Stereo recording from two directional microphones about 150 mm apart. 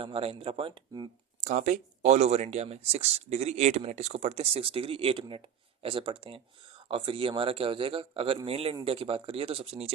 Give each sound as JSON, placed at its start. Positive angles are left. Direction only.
{"t": 0.0, "sound": "a man's voice", "side_deg": -40}
{"t": 1.4, "sound": "a man's voice", "side_deg": -55}